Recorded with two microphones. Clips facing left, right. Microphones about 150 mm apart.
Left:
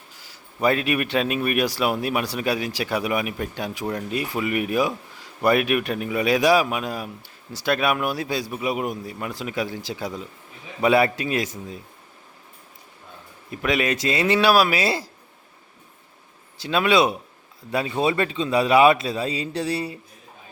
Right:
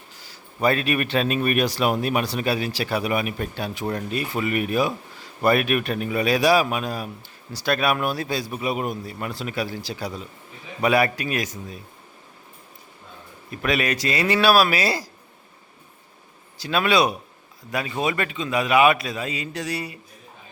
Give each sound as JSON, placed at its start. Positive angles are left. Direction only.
{"t": 0.6, "sound": "speech", "side_deg": 15}
{"t": 13.5, "sound": "speech", "side_deg": 20}
{"t": 16.6, "sound": "a man's voice", "side_deg": 20}